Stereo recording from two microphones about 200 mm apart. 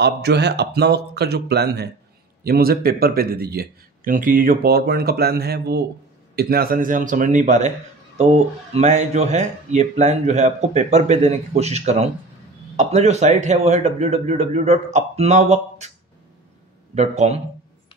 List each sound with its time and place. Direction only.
0.0 s speech: 55° right (ahead or behind); by 7.7 s 40° right (ahead or behind)
8.7 s speech: 35° right (ahead or behind)
16.9 s speech: 35° right (ahead or behind)